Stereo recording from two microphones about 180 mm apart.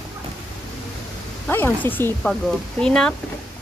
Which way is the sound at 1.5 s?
10° left (ahead or behind).